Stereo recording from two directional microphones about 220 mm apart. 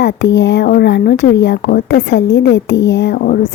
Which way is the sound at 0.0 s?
50° left (ahead or behind).